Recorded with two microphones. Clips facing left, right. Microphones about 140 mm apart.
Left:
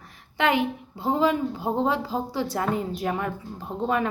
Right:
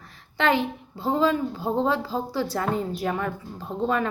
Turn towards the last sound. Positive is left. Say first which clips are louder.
# even
turn(degrees=15)  # may be behind; listen again after turning